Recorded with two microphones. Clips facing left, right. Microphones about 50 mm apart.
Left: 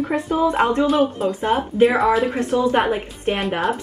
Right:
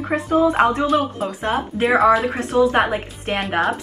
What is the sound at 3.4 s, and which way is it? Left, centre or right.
Speech, centre.